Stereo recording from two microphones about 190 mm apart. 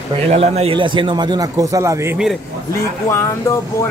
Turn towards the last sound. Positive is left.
turn(degrees=15)  # may be behind; listen again after turning